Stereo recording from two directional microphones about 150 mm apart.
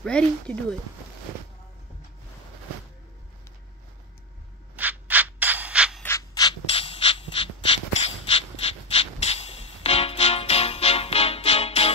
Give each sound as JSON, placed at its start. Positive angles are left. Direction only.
{"t": 0.0, "sound": "speech", "side_deg": 5}
{"t": 4.7, "sound": "rub", "side_deg": -10}
{"t": 6.0, "sound": "rub", "side_deg": 20}
{"t": 6.7, "sound": "a sound", "side_deg": 40}